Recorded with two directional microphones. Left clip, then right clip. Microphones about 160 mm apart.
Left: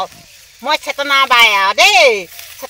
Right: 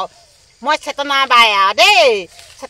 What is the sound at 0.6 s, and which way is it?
Speech, 30° right (ahead or behind).